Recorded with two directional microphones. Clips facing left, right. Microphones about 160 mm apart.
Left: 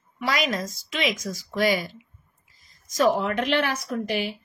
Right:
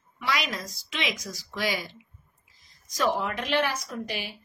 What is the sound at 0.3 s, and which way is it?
Speech, 45° left (ahead or behind).